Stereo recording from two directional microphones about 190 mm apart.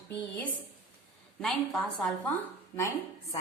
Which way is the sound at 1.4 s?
5° left (ahead or behind).